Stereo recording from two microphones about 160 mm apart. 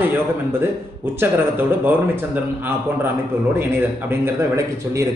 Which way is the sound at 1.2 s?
15° right (ahead or behind).